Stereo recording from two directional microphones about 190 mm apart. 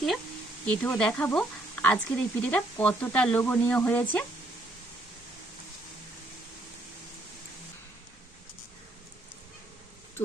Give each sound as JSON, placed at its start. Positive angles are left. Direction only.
{"t": 0.6, "sound": "speech", "side_deg": 5}